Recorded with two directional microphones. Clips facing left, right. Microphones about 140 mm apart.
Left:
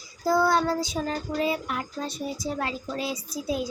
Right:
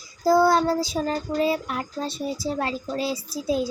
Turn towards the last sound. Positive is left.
turn(degrees=-30)  # may be behind; listen again after turning